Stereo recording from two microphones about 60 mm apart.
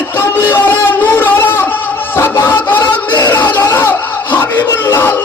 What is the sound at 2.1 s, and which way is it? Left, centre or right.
Music, left.